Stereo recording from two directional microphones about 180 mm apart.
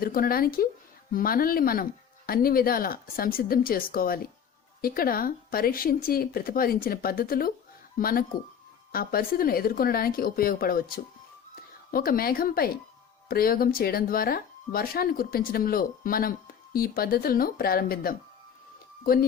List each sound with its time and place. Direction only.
0.0 s speech: 55° left (ahead or behind)